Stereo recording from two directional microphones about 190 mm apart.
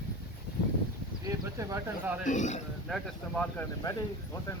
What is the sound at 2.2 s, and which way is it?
Speech, 40° left (ahead or behind).